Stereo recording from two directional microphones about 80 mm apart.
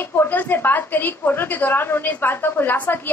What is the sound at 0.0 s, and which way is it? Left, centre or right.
A woman's voice, left.